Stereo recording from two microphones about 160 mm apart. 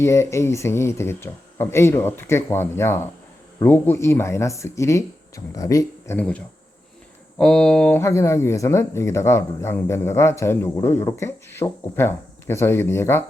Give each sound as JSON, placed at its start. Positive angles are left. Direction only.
{"t": 0.0, "sound": "speech", "side_deg": 15}
{"t": 6.1, "sound": "speech", "side_deg": 10}